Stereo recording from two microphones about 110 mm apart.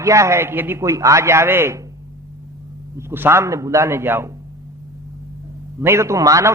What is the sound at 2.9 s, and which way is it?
A man's voice, 20° right (ahead or behind).